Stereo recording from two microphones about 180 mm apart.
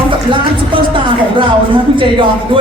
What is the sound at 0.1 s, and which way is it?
Music, 30° right (ahead or behind).